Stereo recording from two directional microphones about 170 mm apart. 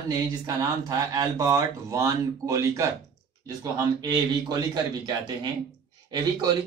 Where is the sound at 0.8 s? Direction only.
25° right (ahead or behind).